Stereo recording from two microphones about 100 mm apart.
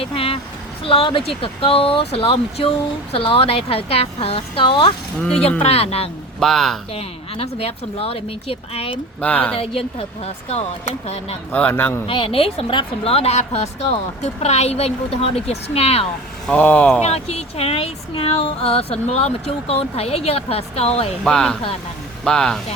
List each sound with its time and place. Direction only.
0.0 s a woman's voice: 70° left (ahead or behind)
3.1 s speech: 70° left (ahead or behind)
5.4 s speech: 90° left
6.4 s speech: 5° left (ahead or behind)
6.9 s speech: 85° left
9.2 s speech: 15° left (ahead or behind)
9.6 s speech: 70° left (ahead or behind); by 11.3 s 90° left
11.5 s speech: 15° left (ahead or behind)
12.0 s speech: 60° left (ahead or behind); by 16.0 s 90° left
16.5 s speech: 15° left (ahead or behind)
17.0 s speech: 90° left
21.2 s speech: 5° left (ahead or behind)